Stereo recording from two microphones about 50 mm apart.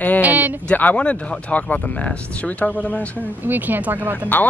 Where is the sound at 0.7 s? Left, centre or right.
Left.